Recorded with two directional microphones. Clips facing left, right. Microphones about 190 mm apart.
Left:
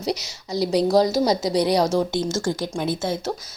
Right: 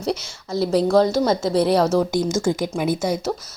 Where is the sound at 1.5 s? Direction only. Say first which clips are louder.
Right 3 dB; 5° right (ahead or behind).